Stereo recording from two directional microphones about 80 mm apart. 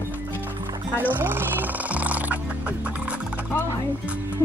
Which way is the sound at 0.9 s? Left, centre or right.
Right.